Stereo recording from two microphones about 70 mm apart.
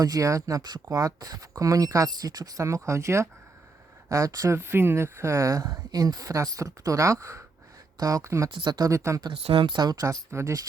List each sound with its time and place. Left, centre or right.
0.0 s speech: right
2.0 s speech: right
4.5 s speech: right
8.6 s speech: right
9.7 s speech: right